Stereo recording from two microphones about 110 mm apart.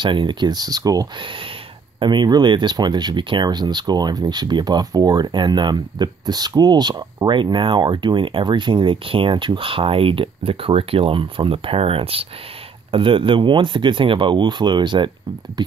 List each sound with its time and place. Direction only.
0.0 s speech: 45° right (ahead or behind)